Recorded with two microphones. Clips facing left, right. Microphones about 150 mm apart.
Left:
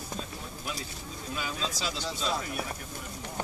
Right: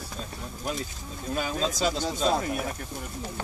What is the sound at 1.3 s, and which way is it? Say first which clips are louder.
Speech: right 7 dB; 45° right (ahead or behind).